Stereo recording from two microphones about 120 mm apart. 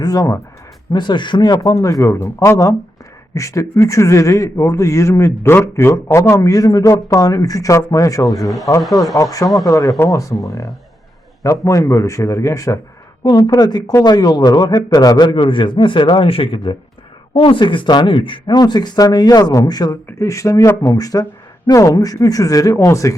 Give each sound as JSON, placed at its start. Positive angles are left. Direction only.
{"t": 0.0, "sound": "a man's voice", "side_deg": 30}
{"t": 8.4, "sound": "speech", "side_deg": 0}
{"t": 9.1, "sound": "a man's voice", "side_deg": 30}
{"t": 11.4, "sound": "a man's voice", "side_deg": 25}
{"t": 20.1, "sound": "a man's voice", "side_deg": 25}